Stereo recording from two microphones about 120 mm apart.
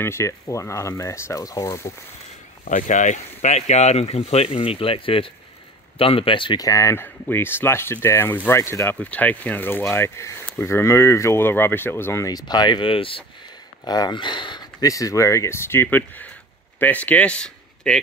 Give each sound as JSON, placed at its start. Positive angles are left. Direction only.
{"t": 0.0, "sound": "speech", "side_deg": 25}
{"t": 2.7, "sound": "speech", "side_deg": 90}
{"t": 6.6, "sound": "speech", "side_deg": 25}
{"t": 13.8, "sound": "speech", "side_deg": 35}